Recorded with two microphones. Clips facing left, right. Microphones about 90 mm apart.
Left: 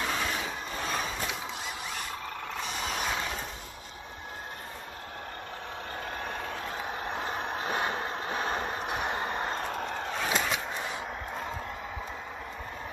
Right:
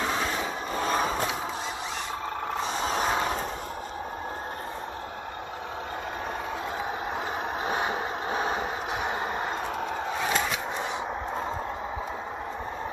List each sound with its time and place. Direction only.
0.0 s vehicle: 25° right (ahead or behind)
0.7 s vehicle: 40° right (ahead or behind)
2.6 s vehicle: 35° right (ahead or behind)
7.1 s vehicle: 15° right (ahead or behind)